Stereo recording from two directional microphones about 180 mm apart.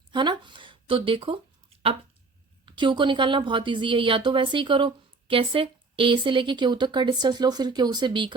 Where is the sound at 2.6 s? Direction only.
25° right (ahead or behind).